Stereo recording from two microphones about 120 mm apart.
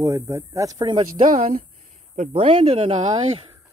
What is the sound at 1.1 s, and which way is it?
Speech, 90° right.